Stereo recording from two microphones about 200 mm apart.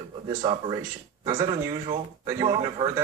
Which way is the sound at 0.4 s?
25° right (ahead or behind).